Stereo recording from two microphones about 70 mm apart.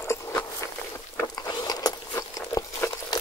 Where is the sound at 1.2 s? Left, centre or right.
Left.